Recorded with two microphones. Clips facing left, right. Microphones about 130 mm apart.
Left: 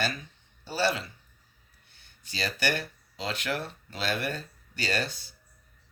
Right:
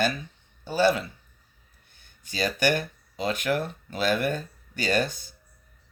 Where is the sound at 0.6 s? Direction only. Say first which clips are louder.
Right 6 dB; 50° right (ahead or behind).